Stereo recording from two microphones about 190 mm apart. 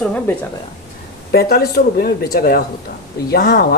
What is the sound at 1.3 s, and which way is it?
Speech, 55° left (ahead or behind).